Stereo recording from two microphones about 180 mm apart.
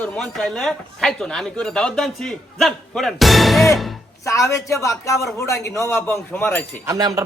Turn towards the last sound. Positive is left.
turn(degrees=-20)  # may be behind; listen again after turning